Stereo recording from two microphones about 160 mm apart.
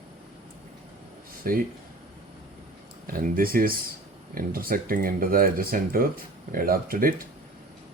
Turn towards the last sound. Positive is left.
turn(degrees=-65)  # may be behind; listen again after turning